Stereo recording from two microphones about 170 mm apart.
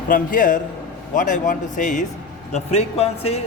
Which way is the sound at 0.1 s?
50° left (ahead or behind).